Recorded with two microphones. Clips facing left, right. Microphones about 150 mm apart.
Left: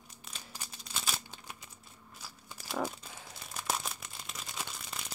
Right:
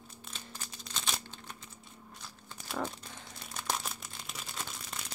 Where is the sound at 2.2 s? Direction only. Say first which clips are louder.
Left 2 dB; 5° left (ahead or behind).